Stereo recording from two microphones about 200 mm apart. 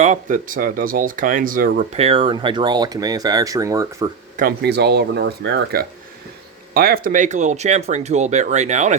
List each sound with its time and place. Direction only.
0.0 s speech: 40° right (ahead or behind)
1.9 s speech: 30° right (ahead or behind)
4.4 s speech: 50° right (ahead or behind)